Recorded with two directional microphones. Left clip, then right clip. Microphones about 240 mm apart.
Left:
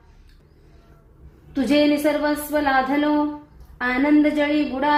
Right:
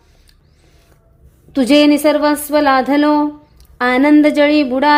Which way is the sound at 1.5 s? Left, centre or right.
Right.